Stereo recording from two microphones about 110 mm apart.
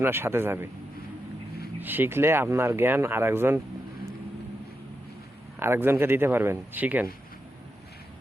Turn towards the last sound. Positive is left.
turn(degrees=-15)  # may be behind; listen again after turning